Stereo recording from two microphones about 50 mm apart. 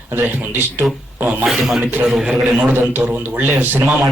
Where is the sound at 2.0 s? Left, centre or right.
Centre.